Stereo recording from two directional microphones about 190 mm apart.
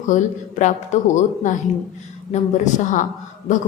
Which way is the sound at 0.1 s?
40° left (ahead or behind).